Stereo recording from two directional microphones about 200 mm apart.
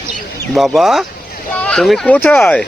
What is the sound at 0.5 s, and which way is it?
Speech, centre (ahead or behind).